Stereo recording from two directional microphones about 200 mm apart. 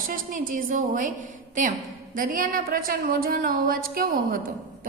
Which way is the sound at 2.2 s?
45° right (ahead or behind).